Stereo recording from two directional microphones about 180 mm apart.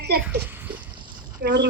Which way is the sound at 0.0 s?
65° right (ahead or behind).